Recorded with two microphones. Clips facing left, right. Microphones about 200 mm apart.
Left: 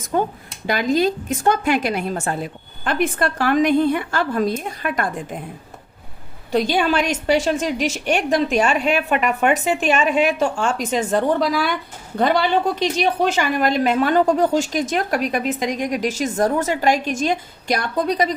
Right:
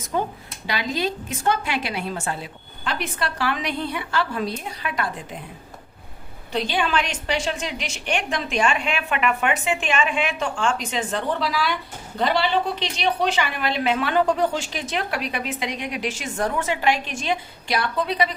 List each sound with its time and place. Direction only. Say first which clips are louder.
0.1 s a woman's voice: left 5 dB; 45° left (ahead or behind)
6.5 s a woman's voice: left 5 dB; 45° left (ahead or behind)